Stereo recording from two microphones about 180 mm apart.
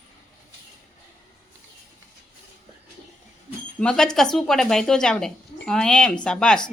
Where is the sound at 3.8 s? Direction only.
5° left (ahead or behind).